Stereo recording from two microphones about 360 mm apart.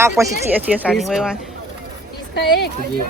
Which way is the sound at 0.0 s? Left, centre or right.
Centre.